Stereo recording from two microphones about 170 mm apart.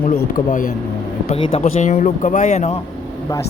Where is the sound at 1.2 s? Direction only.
35° left (ahead or behind).